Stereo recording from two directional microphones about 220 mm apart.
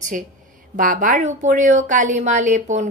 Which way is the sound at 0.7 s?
35° right (ahead or behind).